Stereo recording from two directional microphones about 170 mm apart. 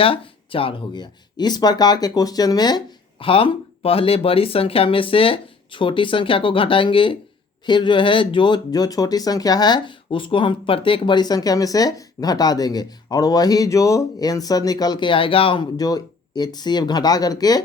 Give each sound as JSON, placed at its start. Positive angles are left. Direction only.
{"t": 0.0, "sound": "speech", "side_deg": 30}